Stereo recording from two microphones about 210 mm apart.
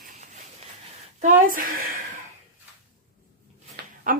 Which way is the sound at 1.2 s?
40° right (ahead or behind).